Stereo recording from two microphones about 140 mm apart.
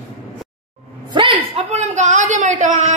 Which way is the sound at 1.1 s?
40° right (ahead or behind).